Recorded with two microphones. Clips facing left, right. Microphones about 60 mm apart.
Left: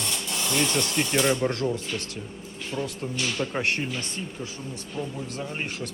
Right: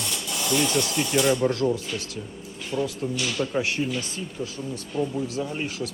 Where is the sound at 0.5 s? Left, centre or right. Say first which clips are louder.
Right 2 dB; centre.